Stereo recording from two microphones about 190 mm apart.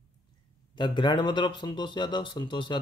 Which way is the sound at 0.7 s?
25° left (ahead or behind).